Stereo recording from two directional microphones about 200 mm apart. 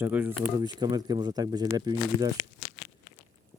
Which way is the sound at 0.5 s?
20° right (ahead or behind).